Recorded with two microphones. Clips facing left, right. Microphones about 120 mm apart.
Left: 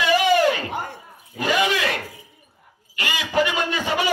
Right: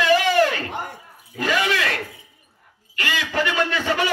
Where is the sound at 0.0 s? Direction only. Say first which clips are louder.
Even; 15° left (ahead or behind).